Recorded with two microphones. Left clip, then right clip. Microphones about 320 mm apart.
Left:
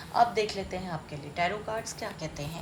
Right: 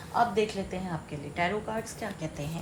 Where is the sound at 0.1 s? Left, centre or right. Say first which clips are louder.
Left 1 dB; centre.